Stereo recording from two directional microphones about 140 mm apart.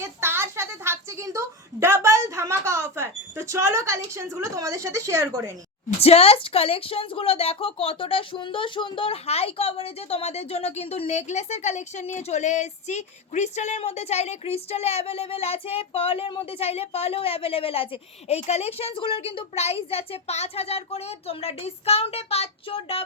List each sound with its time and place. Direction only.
0.0 s a woman's voice: 20° right (ahead or behind)
6.0 s a woman's voice: 45° left (ahead or behind)